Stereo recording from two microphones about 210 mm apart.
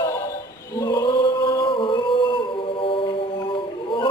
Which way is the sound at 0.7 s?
20° left (ahead or behind).